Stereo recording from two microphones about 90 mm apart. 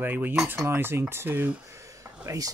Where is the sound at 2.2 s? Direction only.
40° right (ahead or behind).